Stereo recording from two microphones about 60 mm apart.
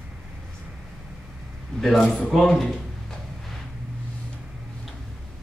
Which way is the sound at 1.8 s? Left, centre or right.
Centre.